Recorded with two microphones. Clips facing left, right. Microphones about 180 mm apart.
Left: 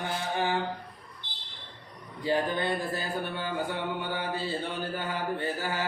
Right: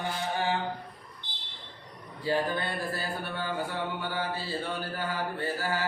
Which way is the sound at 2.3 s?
20° left (ahead or behind).